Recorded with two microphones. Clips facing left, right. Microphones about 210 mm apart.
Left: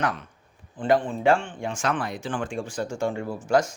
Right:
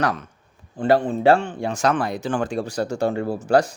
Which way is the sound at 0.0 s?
40° right (ahead or behind).